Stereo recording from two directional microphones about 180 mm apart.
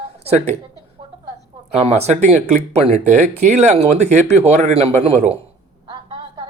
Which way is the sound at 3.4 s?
40° right (ahead or behind).